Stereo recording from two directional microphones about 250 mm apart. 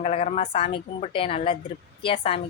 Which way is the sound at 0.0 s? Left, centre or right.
Left.